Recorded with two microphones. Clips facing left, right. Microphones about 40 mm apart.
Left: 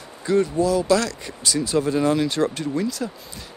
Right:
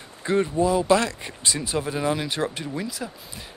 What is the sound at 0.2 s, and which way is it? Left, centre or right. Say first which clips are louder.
Speech: left 2 dB; right.